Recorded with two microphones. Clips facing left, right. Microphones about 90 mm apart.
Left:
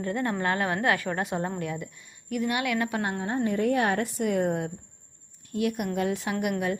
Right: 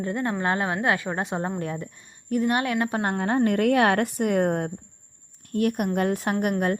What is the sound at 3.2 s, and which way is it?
A woman's voice, 75° right (ahead or behind).